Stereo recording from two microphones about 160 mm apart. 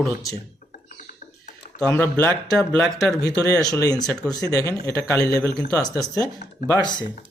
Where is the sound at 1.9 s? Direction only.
10° left (ahead or behind).